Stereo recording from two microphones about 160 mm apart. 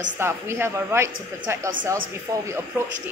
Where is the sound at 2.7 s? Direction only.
15° right (ahead or behind).